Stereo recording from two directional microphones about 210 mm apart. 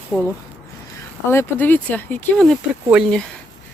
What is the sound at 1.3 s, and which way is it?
Speech, 10° left (ahead or behind).